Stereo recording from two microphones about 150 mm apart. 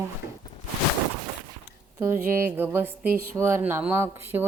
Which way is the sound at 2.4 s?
15° right (ahead or behind).